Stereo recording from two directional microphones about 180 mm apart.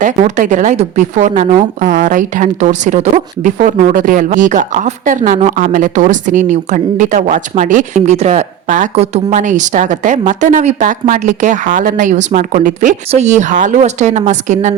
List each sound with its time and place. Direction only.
0.0 s speech: 45° right (ahead or behind)